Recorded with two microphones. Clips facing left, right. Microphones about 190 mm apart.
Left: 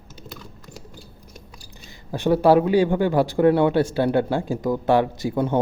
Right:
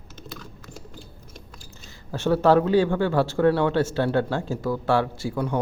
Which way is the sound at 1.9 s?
15° left (ahead or behind).